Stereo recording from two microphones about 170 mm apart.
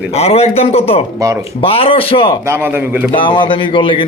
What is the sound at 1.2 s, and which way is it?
Speech, 20° right (ahead or behind).